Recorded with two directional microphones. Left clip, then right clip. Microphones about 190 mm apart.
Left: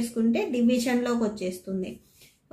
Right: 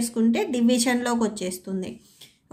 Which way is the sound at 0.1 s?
30° right (ahead or behind).